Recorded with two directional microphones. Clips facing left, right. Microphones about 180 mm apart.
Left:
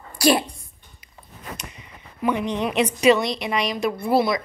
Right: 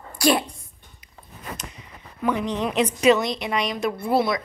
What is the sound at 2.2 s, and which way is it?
Speech, centre (ahead or behind).